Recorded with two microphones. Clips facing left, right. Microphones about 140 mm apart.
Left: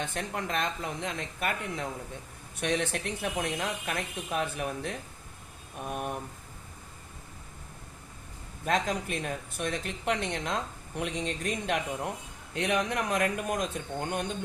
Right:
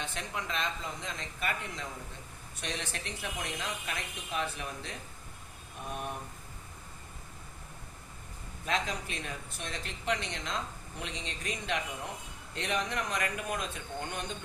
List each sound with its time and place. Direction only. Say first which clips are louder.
0.0 s speech: left 4 dB; 50° left (ahead or behind)
8.6 s speech: left 5 dB; 50° left (ahead or behind)